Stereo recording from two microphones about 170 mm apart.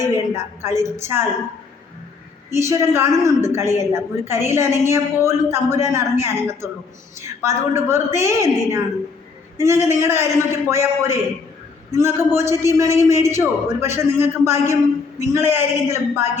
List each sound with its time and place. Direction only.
0.0 s a man's voice: 15° right (ahead or behind)
2.5 s a man's voice: 15° right (ahead or behind)